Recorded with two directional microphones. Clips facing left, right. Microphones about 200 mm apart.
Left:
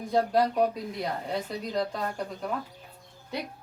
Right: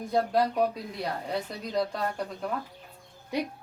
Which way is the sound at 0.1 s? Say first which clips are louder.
Left 1 dB; centre (ahead or behind).